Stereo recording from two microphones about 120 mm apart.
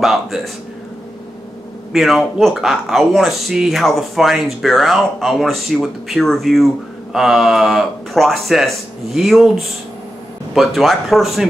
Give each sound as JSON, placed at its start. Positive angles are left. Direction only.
{"t": 0.0, "sound": "speech", "side_deg": 0}
{"t": 1.9, "sound": "speech", "side_deg": 0}